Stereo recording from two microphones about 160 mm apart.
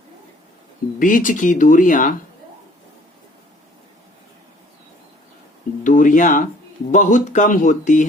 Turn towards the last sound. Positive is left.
turn(degrees=50)  # may be behind; listen again after turning